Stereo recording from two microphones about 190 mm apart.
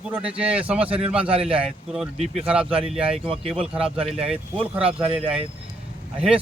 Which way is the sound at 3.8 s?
30° right (ahead or behind).